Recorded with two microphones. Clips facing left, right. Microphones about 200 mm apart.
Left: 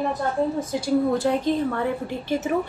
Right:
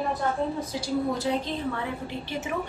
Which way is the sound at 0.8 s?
50° left (ahead or behind).